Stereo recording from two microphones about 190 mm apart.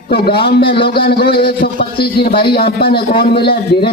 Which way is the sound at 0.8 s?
55° left (ahead or behind).